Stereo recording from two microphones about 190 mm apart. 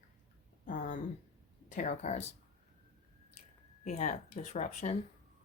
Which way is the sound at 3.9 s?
35° left (ahead or behind).